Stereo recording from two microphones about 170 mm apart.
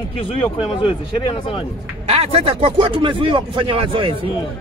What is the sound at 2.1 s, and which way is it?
Speech, 35° right (ahead or behind).